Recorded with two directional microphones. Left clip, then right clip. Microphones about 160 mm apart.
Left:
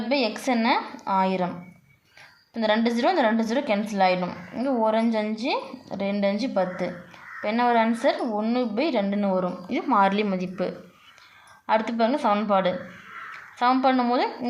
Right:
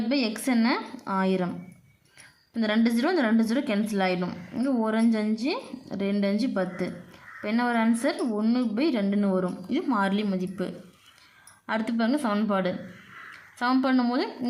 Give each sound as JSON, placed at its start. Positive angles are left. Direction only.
{"t": 0.1, "sound": "a woman's voice", "side_deg": -35}
{"t": 2.6, "sound": "a woman's voice", "side_deg": -35}
{"t": 11.6, "sound": "a woman's voice", "side_deg": -35}